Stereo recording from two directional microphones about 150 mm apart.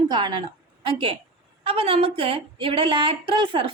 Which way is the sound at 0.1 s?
30° right (ahead or behind).